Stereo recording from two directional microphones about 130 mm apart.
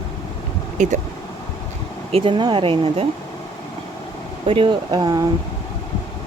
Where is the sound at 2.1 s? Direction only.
40° right (ahead or behind).